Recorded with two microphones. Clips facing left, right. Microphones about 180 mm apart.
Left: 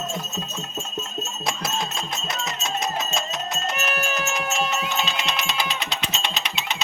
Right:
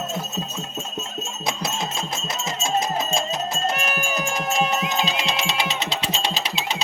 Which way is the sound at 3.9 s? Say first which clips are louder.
Even; 10° right (ahead or behind).